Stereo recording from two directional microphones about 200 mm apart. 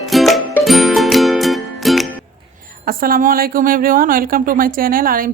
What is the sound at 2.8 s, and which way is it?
Speech, 45° right (ahead or behind).